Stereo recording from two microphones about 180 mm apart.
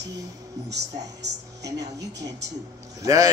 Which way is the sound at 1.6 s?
20° right (ahead or behind).